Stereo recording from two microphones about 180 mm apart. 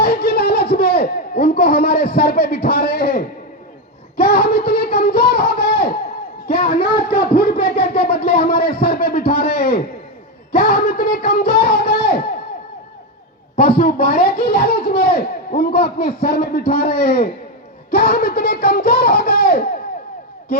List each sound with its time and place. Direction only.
0.0 s laughter: 60° left (ahead or behind)
4.2 s a sound: 60° left (ahead or behind)
10.5 s speech: 60° left (ahead or behind)
13.6 s a man's voice: 60° left (ahead or behind)